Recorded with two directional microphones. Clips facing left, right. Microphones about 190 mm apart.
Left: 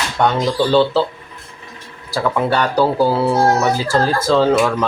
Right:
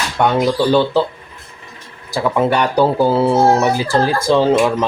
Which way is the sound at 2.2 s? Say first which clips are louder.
Right 2 dB; 20° right (ahead or behind).